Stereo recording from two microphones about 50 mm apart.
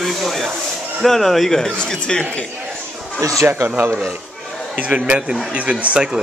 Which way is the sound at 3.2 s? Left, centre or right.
Right.